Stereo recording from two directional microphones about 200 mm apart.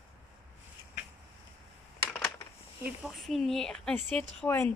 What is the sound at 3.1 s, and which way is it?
A woman's voice, centre (ahead or behind).